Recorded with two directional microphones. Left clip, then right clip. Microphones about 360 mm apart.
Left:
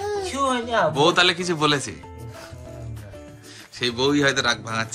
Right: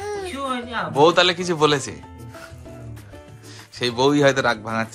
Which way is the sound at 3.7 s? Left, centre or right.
Centre.